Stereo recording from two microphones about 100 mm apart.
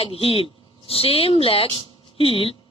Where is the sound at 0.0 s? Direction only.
70° left (ahead or behind).